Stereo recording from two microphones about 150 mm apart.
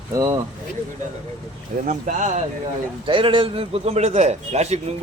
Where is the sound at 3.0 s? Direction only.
35° right (ahead or behind).